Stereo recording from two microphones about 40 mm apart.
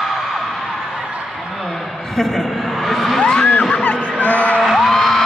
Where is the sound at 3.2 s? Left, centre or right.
Centre; by 4.6 s left.